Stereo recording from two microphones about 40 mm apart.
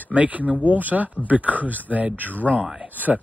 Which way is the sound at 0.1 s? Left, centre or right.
Right.